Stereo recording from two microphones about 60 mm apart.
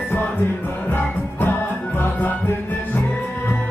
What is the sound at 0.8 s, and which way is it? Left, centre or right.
Music, left.